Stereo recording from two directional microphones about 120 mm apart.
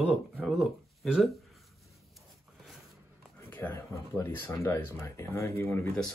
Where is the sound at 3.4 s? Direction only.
15° left (ahead or behind).